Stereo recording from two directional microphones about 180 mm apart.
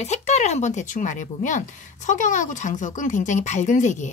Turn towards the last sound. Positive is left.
turn(degrees=40)  # may be behind; listen again after turning